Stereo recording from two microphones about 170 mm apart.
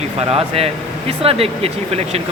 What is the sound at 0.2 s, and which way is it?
Speech, 35° right (ahead or behind).